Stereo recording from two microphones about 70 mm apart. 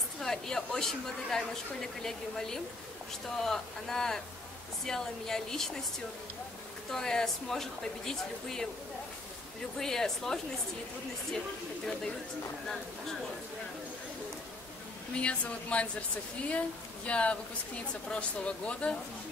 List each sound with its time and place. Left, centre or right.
0.2 s speech: centre
6.9 s speech: centre
9.8 s speech: centre
15.1 s speech: centre